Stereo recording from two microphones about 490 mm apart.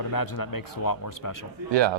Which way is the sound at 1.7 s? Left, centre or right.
Right.